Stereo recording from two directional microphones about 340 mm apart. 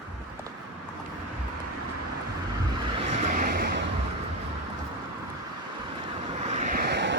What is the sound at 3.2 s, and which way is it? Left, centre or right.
Vehicle, right.